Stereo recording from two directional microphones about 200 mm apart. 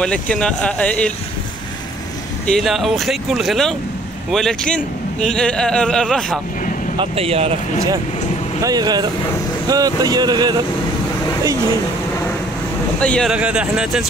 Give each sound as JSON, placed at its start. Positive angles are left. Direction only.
{"t": 0.0, "sound": "a man's voice", "side_deg": 5}
{"t": 2.4, "sound": "a man's voice", "side_deg": 0}
{"t": 7.0, "sound": "speech", "side_deg": -30}
{"t": 8.5, "sound": "speech", "side_deg": -20}
{"t": 13.0, "sound": "a man's voice", "side_deg": 5}